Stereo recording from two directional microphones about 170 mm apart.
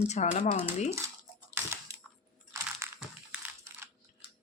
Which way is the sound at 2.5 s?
15° right (ahead or behind).